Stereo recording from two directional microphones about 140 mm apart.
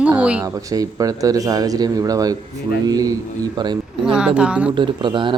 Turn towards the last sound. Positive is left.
turn(degrees=-35)  # may be behind; listen again after turning